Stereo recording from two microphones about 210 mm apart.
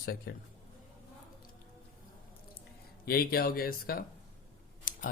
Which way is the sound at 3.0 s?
45° left (ahead or behind).